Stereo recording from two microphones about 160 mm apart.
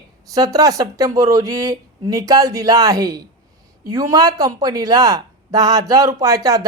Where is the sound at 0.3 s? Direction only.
20° right (ahead or behind).